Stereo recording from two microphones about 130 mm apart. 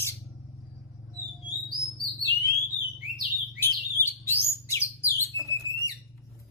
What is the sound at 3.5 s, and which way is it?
Bird, 15° left (ahead or behind).